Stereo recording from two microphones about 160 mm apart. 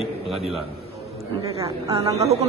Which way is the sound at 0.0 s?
Centre (ahead or behind).